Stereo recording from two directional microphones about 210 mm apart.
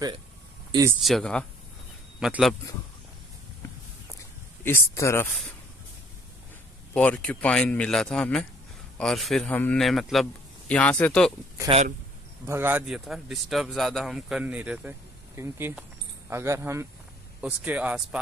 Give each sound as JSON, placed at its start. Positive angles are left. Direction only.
{"t": 0.7, "sound": "speech", "side_deg": -15}
{"t": 1.0, "sound": "speech", "side_deg": 0}
{"t": 4.6, "sound": "speech", "side_deg": 15}
{"t": 6.9, "sound": "speech", "side_deg": 5}
{"t": 11.7, "sound": "speech", "side_deg": -25}
{"t": 12.4, "sound": "speech", "side_deg": -10}